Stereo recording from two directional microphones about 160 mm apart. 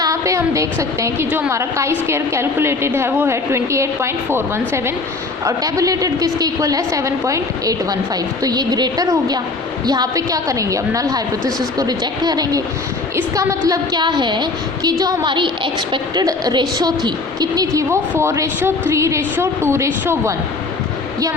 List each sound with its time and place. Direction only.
0.0 s a woman's voice: 20° right (ahead or behind)